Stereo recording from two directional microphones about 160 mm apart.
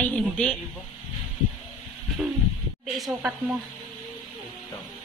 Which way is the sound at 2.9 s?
Centre (ahead or behind).